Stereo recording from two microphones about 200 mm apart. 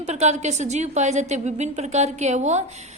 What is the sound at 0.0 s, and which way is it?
A woman's voice, 35° right (ahead or behind).